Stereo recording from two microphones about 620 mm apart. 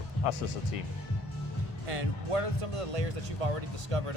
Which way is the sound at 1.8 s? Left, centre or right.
Right.